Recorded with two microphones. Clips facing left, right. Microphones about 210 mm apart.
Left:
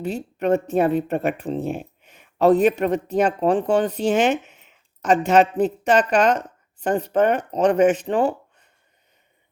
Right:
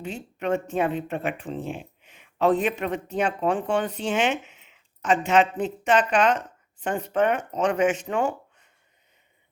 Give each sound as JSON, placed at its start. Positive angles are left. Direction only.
{"t": 0.0, "sound": "speech", "side_deg": 40}